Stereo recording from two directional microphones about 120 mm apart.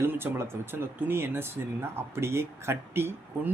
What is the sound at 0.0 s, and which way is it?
Speech, 20° right (ahead or behind).